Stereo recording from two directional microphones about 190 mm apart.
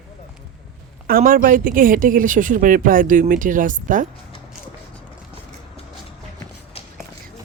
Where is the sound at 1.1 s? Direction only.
50° right (ahead or behind).